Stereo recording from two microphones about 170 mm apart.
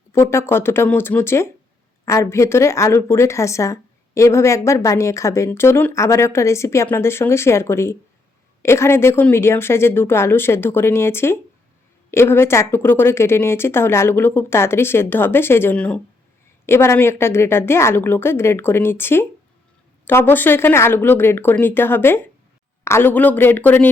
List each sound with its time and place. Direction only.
0.1 s speech: 15° left (ahead or behind)